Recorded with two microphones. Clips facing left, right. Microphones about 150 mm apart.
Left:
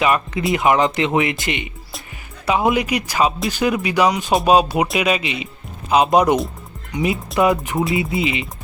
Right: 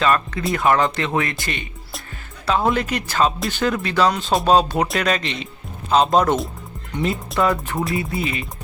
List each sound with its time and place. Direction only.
0.0 s speech: 15° left (ahead or behind)